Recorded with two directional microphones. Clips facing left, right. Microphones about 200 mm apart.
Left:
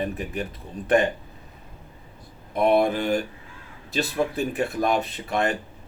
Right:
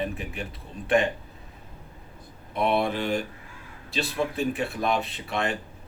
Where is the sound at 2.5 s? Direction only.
45° left (ahead or behind).